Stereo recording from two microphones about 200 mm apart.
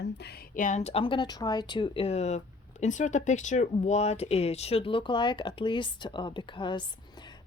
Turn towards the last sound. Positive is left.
turn(degrees=25)  # may be behind; listen again after turning